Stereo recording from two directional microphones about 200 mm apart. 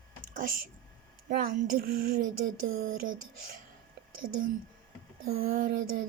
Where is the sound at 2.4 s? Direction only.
85° right.